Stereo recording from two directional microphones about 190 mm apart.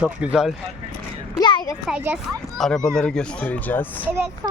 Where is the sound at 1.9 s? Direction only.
5° right (ahead or behind).